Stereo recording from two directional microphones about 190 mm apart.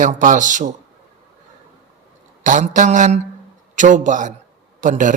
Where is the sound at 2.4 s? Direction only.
40° right (ahead or behind).